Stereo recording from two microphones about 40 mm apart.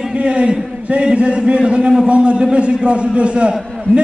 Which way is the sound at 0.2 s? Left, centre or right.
Right.